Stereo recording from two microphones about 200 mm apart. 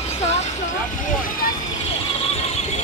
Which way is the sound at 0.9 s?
45° left (ahead or behind).